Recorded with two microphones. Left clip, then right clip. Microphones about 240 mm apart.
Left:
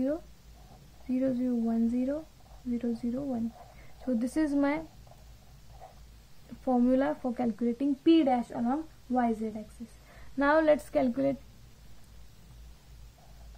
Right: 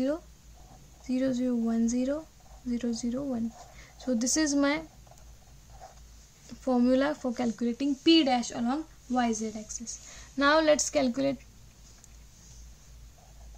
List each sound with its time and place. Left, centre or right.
1.0 s speech: right
6.6 s speech: right